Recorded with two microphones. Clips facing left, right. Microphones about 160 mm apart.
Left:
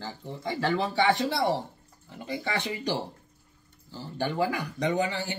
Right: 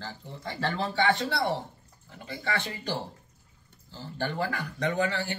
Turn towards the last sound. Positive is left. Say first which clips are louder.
# left 1 dB
turn(degrees=15)  # may be behind; listen again after turning